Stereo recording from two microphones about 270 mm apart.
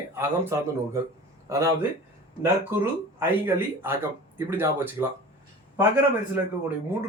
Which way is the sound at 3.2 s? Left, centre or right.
Centre.